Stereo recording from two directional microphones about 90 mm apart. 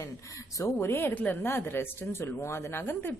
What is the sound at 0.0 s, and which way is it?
A woman's voice, 35° left (ahead or behind).